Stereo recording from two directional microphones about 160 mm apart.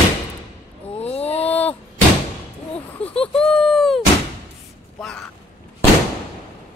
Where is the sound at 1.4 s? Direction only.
10° left (ahead or behind).